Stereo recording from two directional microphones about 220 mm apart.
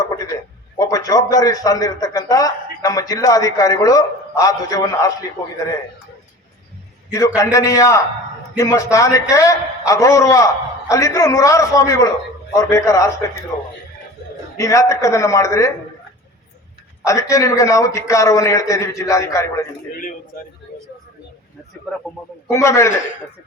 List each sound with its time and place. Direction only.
0.8 s a man's voice: 15° left (ahead or behind)
7.1 s a man's voice: 15° left (ahead or behind)
14.5 s a man's voice: 15° left (ahead or behind)
17.0 s a man's voice: 15° left (ahead or behind)
19.9 s a man's voice: 40° left (ahead or behind)
22.5 s a man's voice: 15° left (ahead or behind)